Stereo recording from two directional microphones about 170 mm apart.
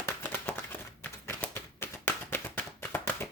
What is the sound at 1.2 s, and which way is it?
Tap, 10° left (ahead or behind).